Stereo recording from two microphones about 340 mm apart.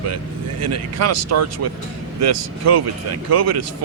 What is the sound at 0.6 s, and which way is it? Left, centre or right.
Speech, right.